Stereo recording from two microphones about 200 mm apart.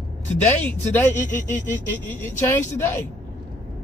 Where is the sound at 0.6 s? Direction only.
5° left (ahead or behind).